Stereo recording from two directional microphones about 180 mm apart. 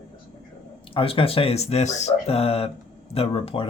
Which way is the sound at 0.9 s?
30° left (ahead or behind).